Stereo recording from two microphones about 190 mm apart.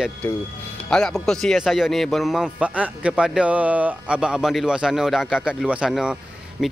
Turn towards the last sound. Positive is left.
turn(degrees=-5)  # may be behind; listen again after turning